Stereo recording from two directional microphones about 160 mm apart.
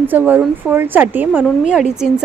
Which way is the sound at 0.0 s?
10° right (ahead or behind).